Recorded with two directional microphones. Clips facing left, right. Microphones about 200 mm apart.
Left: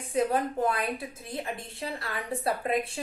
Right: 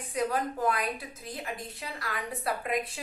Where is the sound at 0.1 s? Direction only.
25° left (ahead or behind).